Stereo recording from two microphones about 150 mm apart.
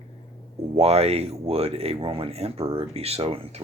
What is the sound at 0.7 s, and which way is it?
Speech, 45° right (ahead or behind).